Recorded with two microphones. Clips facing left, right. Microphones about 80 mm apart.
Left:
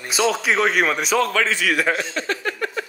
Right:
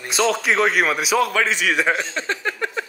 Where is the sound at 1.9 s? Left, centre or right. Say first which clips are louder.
Even; right.